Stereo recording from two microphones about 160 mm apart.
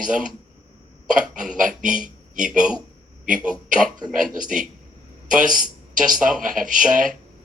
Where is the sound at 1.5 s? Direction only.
55° right (ahead or behind).